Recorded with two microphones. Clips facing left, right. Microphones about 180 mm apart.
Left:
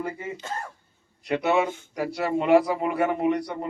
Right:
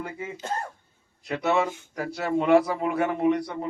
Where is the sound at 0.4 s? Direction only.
35° right (ahead or behind).